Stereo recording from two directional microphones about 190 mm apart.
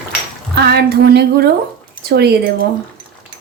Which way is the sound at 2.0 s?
55° right (ahead or behind).